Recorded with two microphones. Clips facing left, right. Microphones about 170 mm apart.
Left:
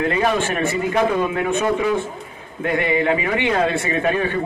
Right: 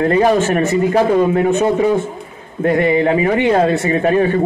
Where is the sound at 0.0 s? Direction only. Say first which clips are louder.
Right 6 dB; 35° right (ahead or behind).